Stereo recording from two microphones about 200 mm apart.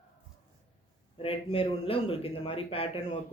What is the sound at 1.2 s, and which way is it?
Speech, 30° left (ahead or behind).